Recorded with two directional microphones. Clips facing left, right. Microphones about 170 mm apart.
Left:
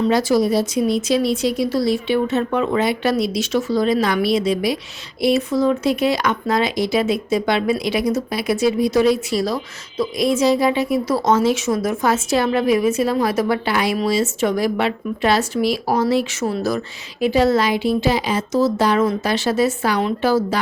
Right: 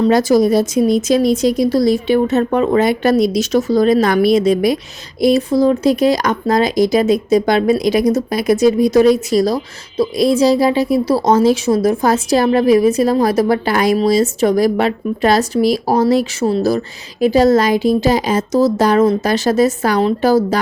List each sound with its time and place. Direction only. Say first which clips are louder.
0.0 s speech: right 5 dB; 45° right (ahead or behind)
5.2 s a woman's voice: right 5 dB; 35° right (ahead or behind)